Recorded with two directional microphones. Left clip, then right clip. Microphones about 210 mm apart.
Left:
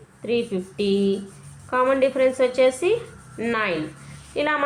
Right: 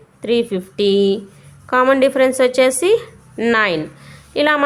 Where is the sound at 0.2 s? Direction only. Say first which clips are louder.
Right 6 dB; 50° right (ahead or behind).